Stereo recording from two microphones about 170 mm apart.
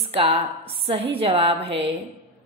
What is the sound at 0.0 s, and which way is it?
A woman's voice, 35° right (ahead or behind).